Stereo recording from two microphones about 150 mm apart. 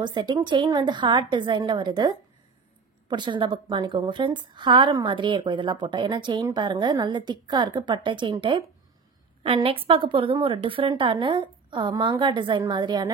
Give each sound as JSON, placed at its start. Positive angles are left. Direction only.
{"t": 0.0, "sound": "a woman's voice", "side_deg": -30}